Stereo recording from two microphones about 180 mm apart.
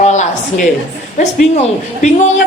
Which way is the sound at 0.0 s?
40° left (ahead or behind).